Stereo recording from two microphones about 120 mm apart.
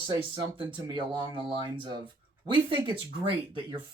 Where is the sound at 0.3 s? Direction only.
50° right (ahead or behind).